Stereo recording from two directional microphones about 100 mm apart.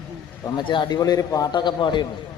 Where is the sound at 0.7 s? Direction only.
50° left (ahead or behind).